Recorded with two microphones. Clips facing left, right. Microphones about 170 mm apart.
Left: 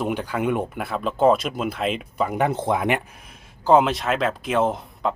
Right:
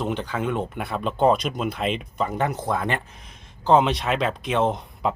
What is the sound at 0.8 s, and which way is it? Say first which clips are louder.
Speech: left 1 dB; centre (ahead or behind).